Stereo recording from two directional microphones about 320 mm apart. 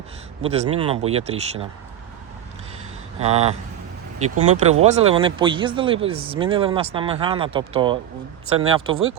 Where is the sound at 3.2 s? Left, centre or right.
Centre.